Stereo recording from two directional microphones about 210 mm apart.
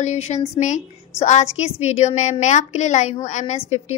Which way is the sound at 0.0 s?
35° left (ahead or behind).